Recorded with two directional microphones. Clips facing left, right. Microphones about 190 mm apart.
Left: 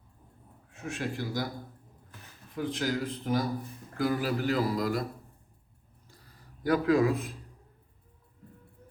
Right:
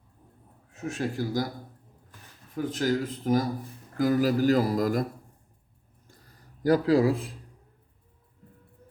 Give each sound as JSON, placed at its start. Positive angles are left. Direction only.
{"t": 0.7, "sound": "speech", "side_deg": -40}
{"t": 2.6, "sound": "a man's voice", "side_deg": -45}
{"t": 6.1, "sound": "a sound", "side_deg": -40}